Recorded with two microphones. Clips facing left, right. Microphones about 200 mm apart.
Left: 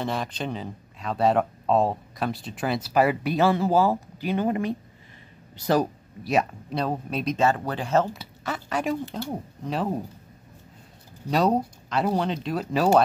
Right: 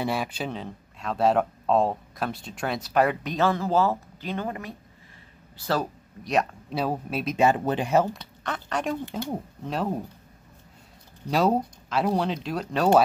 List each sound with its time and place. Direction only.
0.0 s speech: 10° right (ahead or behind); by 5.9 s 15° left (ahead or behind)
6.2 s speech: 5° left (ahead or behind)
7.4 s speech: 20° right (ahead or behind)
8.1 s speech: 5° left (ahead or behind)
11.2 s speech: centre (ahead or behind)